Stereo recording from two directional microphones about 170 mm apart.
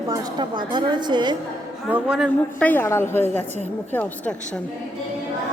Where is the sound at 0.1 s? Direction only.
20° right (ahead or behind).